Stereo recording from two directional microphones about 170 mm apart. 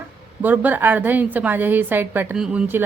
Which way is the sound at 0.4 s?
10° right (ahead or behind).